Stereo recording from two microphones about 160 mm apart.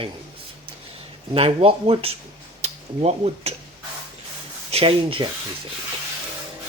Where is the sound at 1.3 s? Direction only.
35° right (ahead or behind).